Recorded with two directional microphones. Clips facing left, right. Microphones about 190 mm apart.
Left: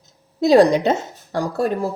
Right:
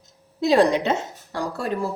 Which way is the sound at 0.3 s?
40° left (ahead or behind).